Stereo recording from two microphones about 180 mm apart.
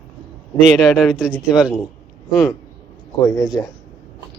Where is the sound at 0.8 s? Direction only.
Centre (ahead or behind).